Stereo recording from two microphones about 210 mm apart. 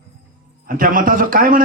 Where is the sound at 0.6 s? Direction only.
40° right (ahead or behind).